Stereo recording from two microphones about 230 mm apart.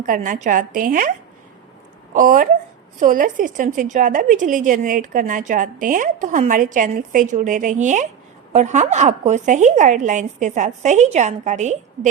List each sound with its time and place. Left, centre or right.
0.0 s a woman's voice: right
2.1 s a woman's voice: right